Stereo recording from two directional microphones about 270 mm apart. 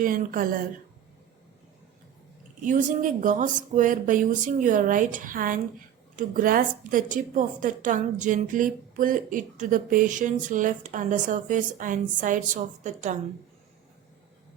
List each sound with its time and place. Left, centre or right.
0.0 s speech: right
2.6 s a woman's voice: right